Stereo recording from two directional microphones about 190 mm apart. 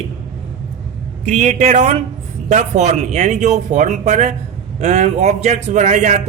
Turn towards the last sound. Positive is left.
turn(degrees=-40)  # may be behind; listen again after turning